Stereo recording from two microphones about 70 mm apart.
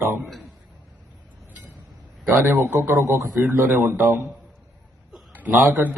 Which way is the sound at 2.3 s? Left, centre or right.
Right.